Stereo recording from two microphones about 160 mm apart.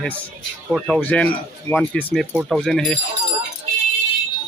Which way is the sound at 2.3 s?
5° right (ahead or behind).